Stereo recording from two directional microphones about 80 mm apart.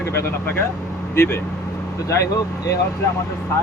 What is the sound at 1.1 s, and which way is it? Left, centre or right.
Speech, left.